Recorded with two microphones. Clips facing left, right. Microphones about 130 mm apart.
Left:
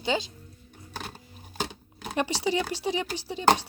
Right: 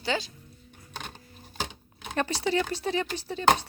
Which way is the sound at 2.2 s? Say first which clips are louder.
Even; 10° left (ahead or behind).